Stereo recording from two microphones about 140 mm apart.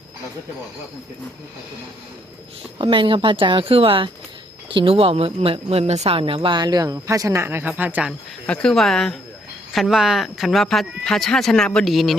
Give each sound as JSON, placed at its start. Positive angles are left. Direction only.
{"t": 2.7, "sound": "speech", "side_deg": -35}
{"t": 8.4, "sound": "speech", "side_deg": 5}